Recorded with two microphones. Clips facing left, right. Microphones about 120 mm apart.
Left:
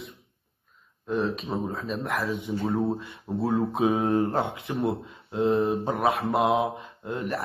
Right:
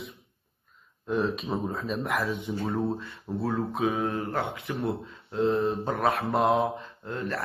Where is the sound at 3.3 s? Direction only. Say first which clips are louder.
Left 4 dB; 25° left (ahead or behind).